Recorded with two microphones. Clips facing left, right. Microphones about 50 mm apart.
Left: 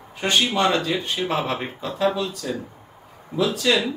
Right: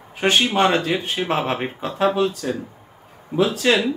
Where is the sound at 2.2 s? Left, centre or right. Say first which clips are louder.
Right 5 dB; right.